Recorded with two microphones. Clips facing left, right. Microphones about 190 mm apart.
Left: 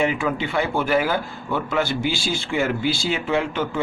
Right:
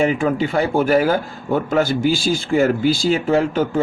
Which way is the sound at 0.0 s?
40° right (ahead or behind).